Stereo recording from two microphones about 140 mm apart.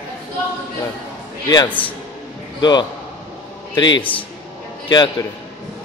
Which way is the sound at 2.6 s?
30° left (ahead or behind).